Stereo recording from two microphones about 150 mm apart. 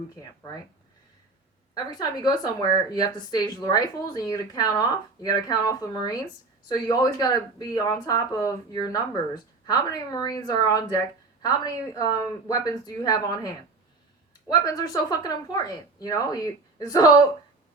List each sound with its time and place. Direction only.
0.2 s a woman's voice: 25° left (ahead or behind)
1.7 s a woman's voice: 25° left (ahead or behind)
14.6 s a woman's voice: 25° left (ahead or behind)